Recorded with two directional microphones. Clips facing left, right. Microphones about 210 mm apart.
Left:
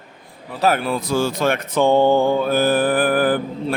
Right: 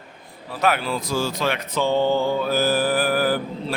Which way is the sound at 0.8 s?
55° left (ahead or behind).